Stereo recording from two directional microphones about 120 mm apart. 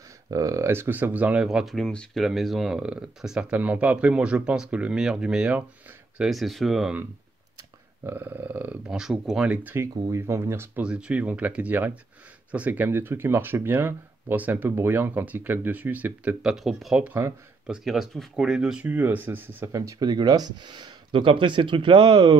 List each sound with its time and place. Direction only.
0.3 s speech: 25° right (ahead or behind); by 7.0 s centre (ahead or behind)
8.0 s speech: 15° right (ahead or behind)
10.0 s speech: 25° right (ahead or behind)
10.8 s speech: 10° right (ahead or behind)
16.5 s speech: centre (ahead or behind); by 22.4 s 40° right (ahead or behind)